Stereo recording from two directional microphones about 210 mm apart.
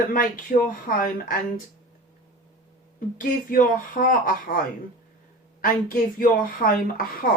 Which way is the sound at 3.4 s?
40° left (ahead or behind).